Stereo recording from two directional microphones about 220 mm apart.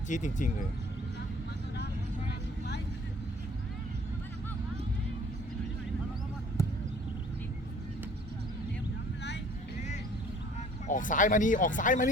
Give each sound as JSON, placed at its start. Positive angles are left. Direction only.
{"t": 0.1, "sound": "speech", "side_deg": 35}
{"t": 6.6, "sound": "a sound", "side_deg": 15}
{"t": 10.8, "sound": "speech", "side_deg": 35}